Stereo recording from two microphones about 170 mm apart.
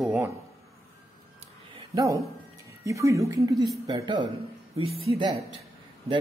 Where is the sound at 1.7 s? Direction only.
20° right (ahead or behind).